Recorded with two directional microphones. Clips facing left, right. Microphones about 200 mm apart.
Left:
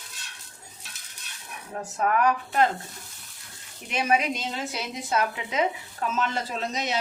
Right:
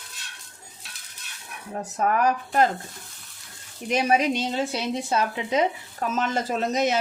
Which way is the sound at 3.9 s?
40° right (ahead or behind).